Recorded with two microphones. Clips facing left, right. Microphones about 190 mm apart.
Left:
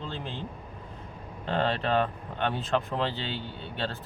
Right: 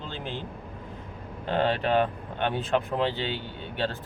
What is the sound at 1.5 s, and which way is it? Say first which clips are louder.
Speech: right 2 dB; 10° right (ahead or behind).